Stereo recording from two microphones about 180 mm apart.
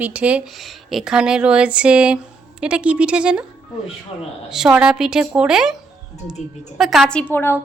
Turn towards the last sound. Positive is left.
turn(degrees=10)  # may be behind; listen again after turning